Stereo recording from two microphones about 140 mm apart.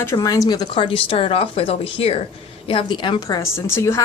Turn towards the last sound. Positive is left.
turn(degrees=20)  # may be behind; listen again after turning